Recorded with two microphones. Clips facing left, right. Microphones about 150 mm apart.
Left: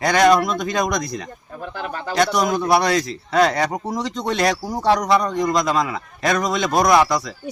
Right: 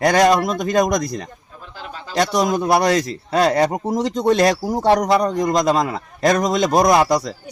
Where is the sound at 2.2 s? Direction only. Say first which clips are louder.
Right 1 dB; 40° right (ahead or behind).